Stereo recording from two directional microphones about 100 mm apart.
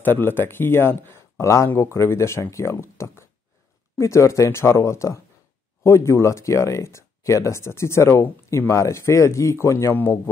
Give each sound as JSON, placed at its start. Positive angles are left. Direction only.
{"t": 0.0, "sound": "speech", "side_deg": 20}